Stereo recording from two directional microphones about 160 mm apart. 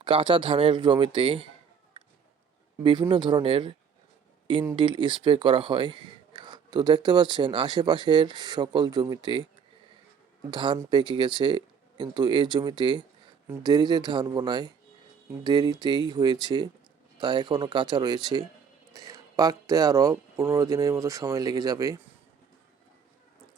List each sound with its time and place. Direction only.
0.0 s speech: 30° right (ahead or behind)
2.8 s speech: 30° right (ahead or behind)
10.5 s speech: 30° right (ahead or behind)